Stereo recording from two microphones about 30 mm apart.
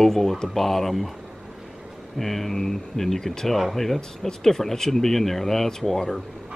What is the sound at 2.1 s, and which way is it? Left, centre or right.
Speech, centre.